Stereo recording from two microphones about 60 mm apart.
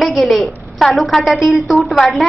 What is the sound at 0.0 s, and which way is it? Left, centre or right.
A woman's voice, centre.